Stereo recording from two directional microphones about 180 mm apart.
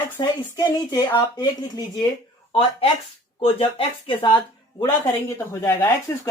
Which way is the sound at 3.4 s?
30° left (ahead or behind).